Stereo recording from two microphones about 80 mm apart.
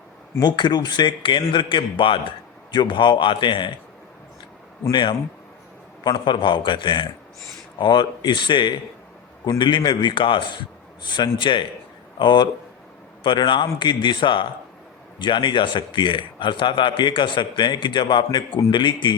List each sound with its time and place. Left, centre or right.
0.3 s a man's voice: left
2.7 s a man's voice: left
4.9 s a man's voice: left
6.1 s a man's voice: left
11.0 s a man's voice: left